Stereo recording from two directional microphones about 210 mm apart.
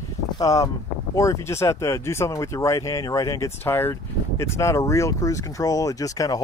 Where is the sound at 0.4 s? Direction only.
15° left (ahead or behind).